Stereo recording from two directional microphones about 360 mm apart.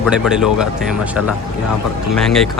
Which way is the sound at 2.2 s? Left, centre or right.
Centre.